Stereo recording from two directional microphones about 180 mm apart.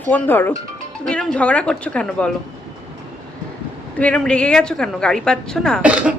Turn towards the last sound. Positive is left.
turn(degrees=-5)  # may be behind; listen again after turning